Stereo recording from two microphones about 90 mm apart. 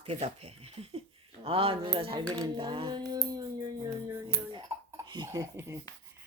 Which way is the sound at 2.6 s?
65° right (ahead or behind).